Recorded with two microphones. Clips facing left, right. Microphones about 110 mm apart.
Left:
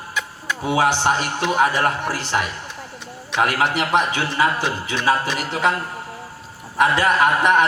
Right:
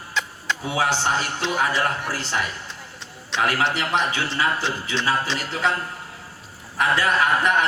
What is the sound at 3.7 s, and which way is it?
Speech, 60° left (ahead or behind).